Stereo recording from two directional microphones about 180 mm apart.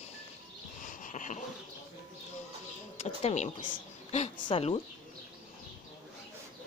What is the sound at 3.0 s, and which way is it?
Speech, 35° left (ahead or behind).